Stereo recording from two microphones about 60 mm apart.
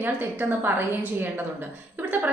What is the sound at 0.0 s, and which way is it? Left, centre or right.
A woman's voice, right.